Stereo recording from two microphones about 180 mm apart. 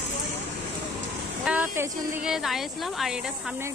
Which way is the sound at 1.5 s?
10° right (ahead or behind).